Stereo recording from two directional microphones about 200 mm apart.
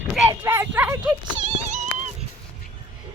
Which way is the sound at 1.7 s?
40° right (ahead or behind).